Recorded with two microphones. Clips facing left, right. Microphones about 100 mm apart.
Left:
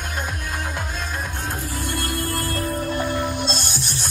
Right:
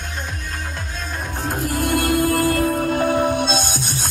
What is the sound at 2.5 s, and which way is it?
Music, 60° right (ahead or behind).